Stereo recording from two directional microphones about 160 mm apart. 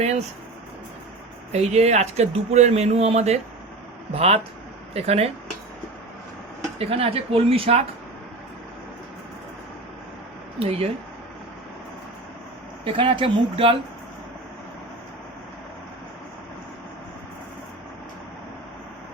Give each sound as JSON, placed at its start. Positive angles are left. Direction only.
{"t": 1.5, "sound": "speech", "side_deg": -45}
{"t": 6.7, "sound": "speech", "side_deg": -40}
{"t": 10.6, "sound": "speech", "side_deg": -35}
{"t": 12.8, "sound": "speech", "side_deg": -35}